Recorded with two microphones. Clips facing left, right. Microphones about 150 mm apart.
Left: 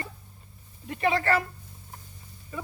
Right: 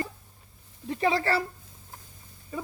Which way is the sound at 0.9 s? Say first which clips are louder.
Even; 30° right (ahead or behind).